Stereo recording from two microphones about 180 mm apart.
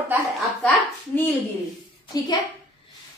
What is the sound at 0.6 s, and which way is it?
A child's voice, 10° left (ahead or behind).